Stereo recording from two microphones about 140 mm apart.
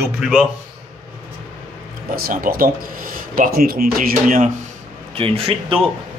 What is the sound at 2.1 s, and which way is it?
Speech, 90° right.